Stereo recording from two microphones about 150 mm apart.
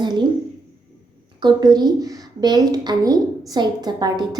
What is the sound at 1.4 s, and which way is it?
A woman's voice, 25° right (ahead or behind).